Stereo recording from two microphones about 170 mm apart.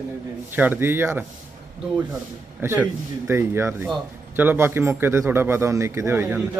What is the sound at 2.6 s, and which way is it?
A man's voice, 15° right (ahead or behind).